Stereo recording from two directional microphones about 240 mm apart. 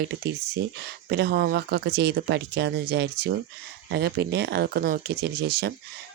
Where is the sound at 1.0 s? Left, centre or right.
Right.